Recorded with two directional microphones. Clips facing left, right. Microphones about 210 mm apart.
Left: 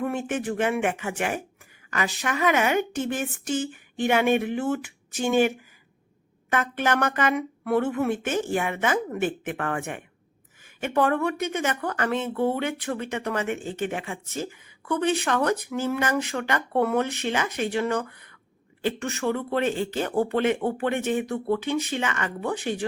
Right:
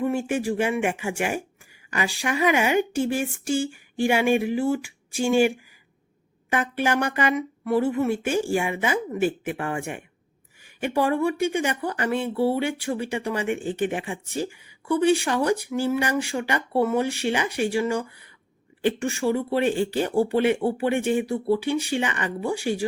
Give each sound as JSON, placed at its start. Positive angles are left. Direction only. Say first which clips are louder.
{"t": 0.0, "sound": "speech", "louder": "right 3 dB", "side_deg": -10}
{"t": 7.3, "sound": "speech", "louder": "right 1 dB", "side_deg": 0}